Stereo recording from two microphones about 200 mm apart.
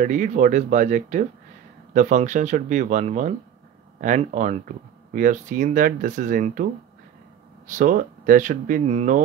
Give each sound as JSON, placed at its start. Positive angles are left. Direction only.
{"t": 0.0, "sound": "speech", "side_deg": -40}